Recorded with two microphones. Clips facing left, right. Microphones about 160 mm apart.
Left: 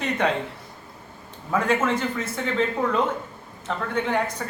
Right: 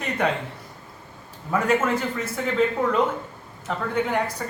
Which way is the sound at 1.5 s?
5° right (ahead or behind).